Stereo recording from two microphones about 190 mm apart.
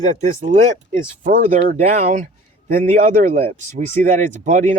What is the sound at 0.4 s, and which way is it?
Speech, 40° right (ahead or behind).